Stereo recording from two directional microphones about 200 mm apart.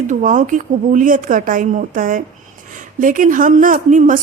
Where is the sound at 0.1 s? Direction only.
40° right (ahead or behind).